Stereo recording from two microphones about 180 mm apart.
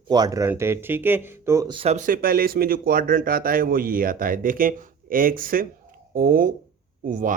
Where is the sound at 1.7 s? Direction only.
35° right (ahead or behind).